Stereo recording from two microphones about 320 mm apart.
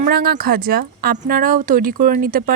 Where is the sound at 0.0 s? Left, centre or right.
Right.